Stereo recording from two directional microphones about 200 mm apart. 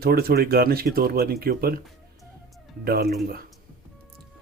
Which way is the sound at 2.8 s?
50° right (ahead or behind).